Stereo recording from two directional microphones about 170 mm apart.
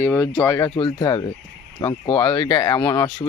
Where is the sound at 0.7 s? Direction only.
30° left (ahead or behind).